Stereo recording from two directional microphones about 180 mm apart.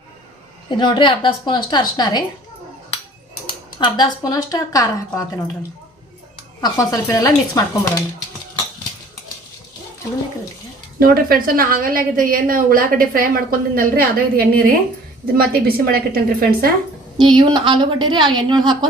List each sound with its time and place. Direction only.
0.7 s speech: 25° left (ahead or behind)
3.8 s speech: 25° left (ahead or behind)
6.6 s speech: 20° left (ahead or behind)
11.0 s a woman's voice: 55° right (ahead or behind)
17.2 s a woman's voice: 25° right (ahead or behind)